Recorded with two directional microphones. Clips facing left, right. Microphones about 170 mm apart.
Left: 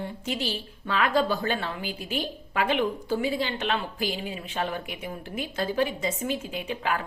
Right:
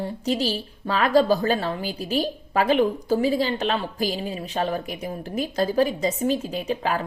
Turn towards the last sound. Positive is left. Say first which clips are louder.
# right 4 dB
turn(degrees=-35)  # may be behind; listen again after turning